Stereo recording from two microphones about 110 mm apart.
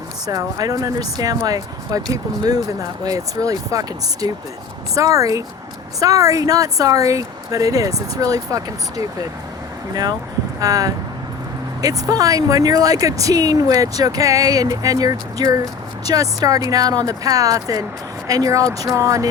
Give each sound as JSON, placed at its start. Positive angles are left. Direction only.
{"t": 0.3, "sound": "speech", "side_deg": -35}
{"t": 3.0, "sound": "speech", "side_deg": -35}
{"t": 9.9, "sound": "speech", "side_deg": -35}